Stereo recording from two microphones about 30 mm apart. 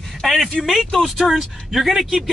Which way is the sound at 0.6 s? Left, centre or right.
Centre.